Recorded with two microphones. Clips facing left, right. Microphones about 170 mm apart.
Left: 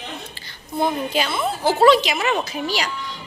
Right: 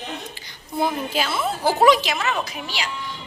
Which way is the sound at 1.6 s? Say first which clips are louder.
Left 2 dB; 15° right (ahead or behind).